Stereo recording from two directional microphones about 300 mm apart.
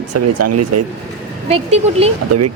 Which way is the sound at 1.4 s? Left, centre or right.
Centre.